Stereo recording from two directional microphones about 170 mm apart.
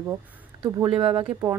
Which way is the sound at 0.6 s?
30° right (ahead or behind).